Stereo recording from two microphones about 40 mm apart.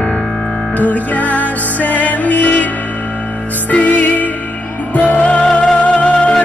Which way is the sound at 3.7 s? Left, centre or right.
Left.